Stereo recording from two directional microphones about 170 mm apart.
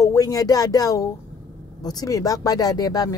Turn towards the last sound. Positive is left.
turn(degrees=20)  # may be behind; listen again after turning